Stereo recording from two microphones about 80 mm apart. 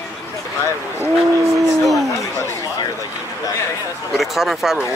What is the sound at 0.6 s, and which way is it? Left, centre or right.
Speech, right.